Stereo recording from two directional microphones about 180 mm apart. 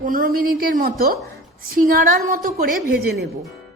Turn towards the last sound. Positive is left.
turn(degrees=-55)  # may be behind; listen again after turning